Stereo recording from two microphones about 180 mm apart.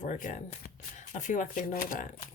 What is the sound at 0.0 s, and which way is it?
Speech, 45° left (ahead or behind).